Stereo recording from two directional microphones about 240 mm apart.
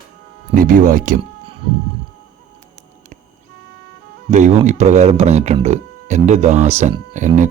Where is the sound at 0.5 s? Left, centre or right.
Right.